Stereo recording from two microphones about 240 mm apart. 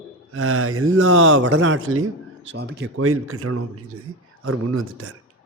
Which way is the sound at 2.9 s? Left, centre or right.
Right.